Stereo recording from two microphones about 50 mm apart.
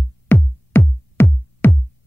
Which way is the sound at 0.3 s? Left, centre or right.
Left.